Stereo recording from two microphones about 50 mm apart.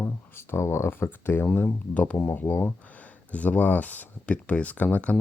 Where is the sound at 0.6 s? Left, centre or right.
Left.